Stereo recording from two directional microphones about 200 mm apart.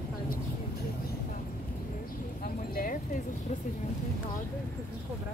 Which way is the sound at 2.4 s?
45° left (ahead or behind).